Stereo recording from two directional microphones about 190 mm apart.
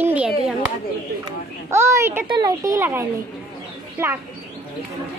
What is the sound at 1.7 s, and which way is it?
Speech, 15° right (ahead or behind).